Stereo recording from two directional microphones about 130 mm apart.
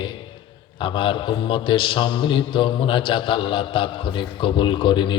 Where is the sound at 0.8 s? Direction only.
40° left (ahead or behind).